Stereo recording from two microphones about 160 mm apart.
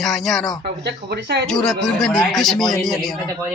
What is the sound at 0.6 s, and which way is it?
Speech, 90° right.